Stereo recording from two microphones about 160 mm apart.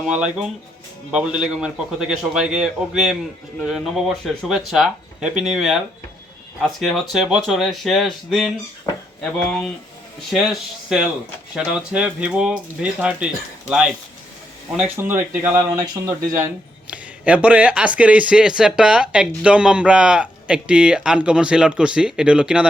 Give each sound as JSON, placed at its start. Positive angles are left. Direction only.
{"t": 0.1, "sound": "speech", "side_deg": -5}
{"t": 14.9, "sound": "speech", "side_deg": -15}
{"t": 16.8, "sound": "speech", "side_deg": -10}